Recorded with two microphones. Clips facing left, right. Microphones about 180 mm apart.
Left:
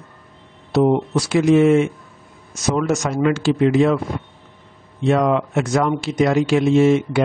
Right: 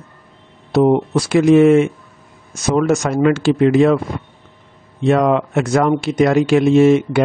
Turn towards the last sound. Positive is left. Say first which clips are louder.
# right 3 dB
turn(degrees=-60)  # may be behind; listen again after turning